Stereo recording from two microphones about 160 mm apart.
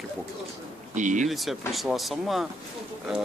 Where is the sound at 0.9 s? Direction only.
50° right (ahead or behind).